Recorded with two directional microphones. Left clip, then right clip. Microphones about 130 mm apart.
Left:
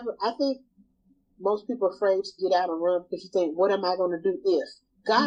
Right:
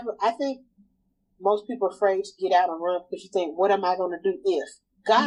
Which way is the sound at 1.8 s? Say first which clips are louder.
Right 1 dB; 25° right (ahead or behind).